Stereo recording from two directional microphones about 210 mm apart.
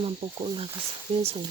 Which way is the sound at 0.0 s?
25° right (ahead or behind).